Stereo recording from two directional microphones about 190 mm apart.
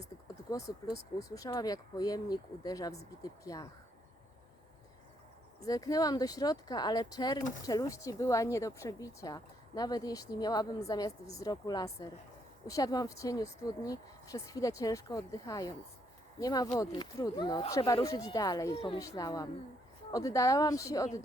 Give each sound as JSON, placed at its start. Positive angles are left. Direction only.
{"t": 0.5, "sound": "speech", "side_deg": 15}
{"t": 5.5, "sound": "speech", "side_deg": 20}
{"t": 18.9, "sound": "speech", "side_deg": 20}